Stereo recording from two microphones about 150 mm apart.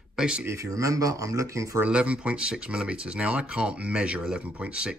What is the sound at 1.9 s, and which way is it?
Speech, 5° right (ahead or behind).